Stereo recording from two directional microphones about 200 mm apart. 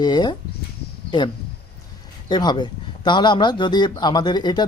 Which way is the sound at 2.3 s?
20° left (ahead or behind).